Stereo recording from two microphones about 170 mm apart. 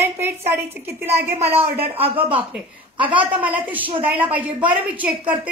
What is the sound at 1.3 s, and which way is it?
Speech, 35° right (ahead or behind).